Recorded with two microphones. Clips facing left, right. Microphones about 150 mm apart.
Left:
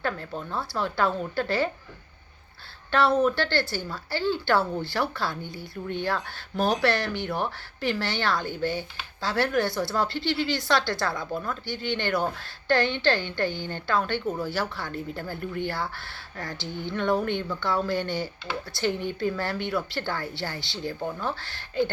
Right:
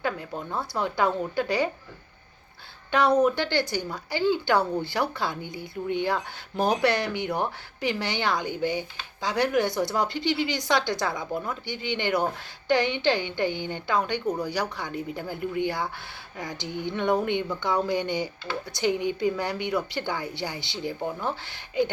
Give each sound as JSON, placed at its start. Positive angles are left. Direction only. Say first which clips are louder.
{"t": 0.0, "sound": "speech", "louder": "right 1 dB", "side_deg": -15}
{"t": 2.9, "sound": "speech", "louder": "right 1 dB", "side_deg": -15}